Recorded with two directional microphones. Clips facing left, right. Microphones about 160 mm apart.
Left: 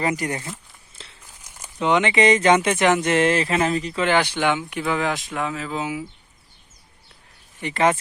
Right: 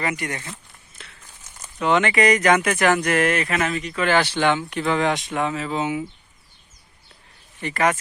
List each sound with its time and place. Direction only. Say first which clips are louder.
0.0 s speech: left 3 dB; 35° left (ahead or behind)
1.0 s crumpling: even; 30° left (ahead or behind)
1.4 s speech: left 1 dB; 10° left (ahead or behind); by 4.1 s 30° left (ahead or behind)
4.1 s speech: right 1 dB; 15° left (ahead or behind)
7.6 s speech: left 2 dB; 25° left (ahead or behind)